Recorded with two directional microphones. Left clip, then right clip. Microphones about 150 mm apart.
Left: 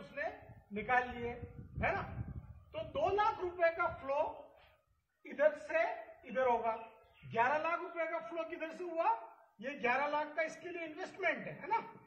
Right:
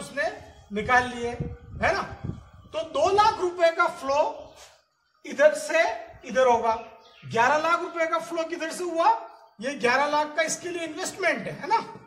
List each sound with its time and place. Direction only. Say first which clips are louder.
0.8 s a woman's voice: right 12 dB; 25° right (ahead or behind)
2.7 s a woman's voice: right 12 dB; 30° right (ahead or behind)
7.3 s a woman's voice: right 12 dB; 30° right (ahead or behind)